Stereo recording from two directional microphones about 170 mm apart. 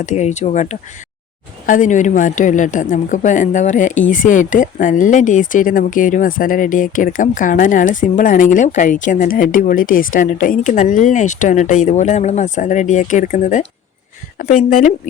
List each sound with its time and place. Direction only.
0.0 s speech: 45° left (ahead or behind)